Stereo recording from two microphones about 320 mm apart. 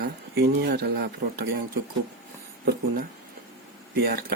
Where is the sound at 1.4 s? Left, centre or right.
Right.